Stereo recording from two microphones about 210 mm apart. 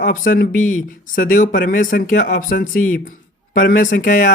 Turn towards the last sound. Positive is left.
turn(degrees=40)  # may be behind; listen again after turning